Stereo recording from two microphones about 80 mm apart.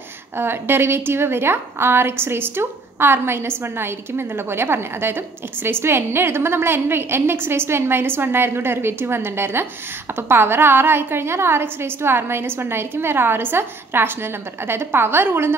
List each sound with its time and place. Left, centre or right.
0.4 s a woman's voice: right